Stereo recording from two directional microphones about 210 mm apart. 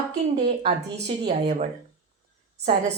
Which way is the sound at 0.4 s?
30° right (ahead or behind).